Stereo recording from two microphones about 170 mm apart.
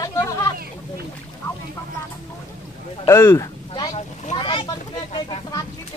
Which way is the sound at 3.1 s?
15° left (ahead or behind).